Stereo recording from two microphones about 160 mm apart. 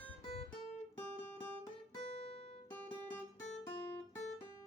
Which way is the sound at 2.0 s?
40° left (ahead or behind).